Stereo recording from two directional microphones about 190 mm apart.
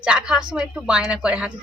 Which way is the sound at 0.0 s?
5° right (ahead or behind).